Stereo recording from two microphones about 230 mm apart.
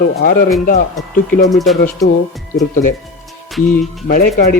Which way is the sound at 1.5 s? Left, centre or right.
Centre.